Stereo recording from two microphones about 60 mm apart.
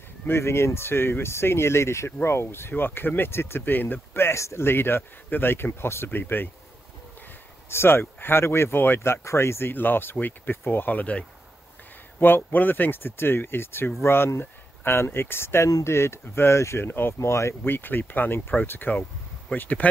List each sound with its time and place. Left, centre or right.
0.3 s speech: left
4.6 s speech: left
6.0 s speech: left
7.7 s speech: left
12.2 s speech: left
17.7 s speech: left